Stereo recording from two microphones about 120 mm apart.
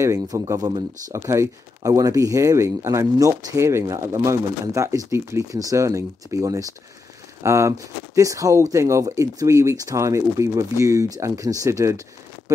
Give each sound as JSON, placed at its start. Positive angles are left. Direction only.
{"t": 0.0, "sound": "speech", "side_deg": -25}